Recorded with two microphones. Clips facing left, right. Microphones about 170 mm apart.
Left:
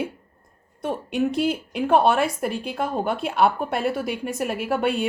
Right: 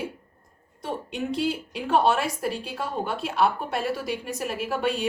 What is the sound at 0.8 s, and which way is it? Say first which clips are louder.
A woman's voice: left 6 dB; 55° left (ahead or behind).